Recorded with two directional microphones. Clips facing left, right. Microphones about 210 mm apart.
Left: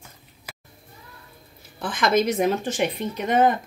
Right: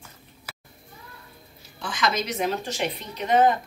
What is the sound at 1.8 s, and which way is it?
Speech, 55° left (ahead or behind).